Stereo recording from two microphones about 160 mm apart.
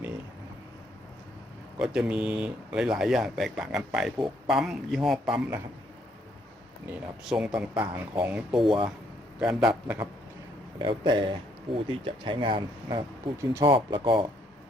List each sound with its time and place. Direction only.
1.8 s speech: 5° right (ahead or behind)
7.3 s speech: 5° right (ahead or behind)
8.6 s speech: 30° right (ahead or behind)
9.4 s speech: 5° right (ahead or behind)
10.8 s speech: 30° right (ahead or behind)
13.4 s speech: 20° right (ahead or behind)
13.7 s speech: 30° right (ahead or behind)